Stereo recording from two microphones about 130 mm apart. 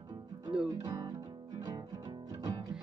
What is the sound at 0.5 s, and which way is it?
Music, 10° right (ahead or behind).